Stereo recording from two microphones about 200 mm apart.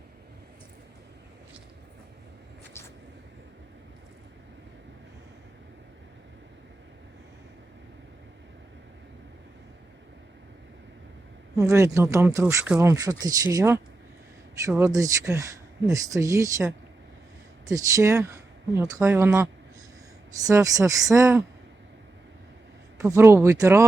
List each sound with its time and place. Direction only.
11.5 s speech: 15° right (ahead or behind)
20.5 s speech: 15° right (ahead or behind)
23.0 s speech: 15° right (ahead or behind)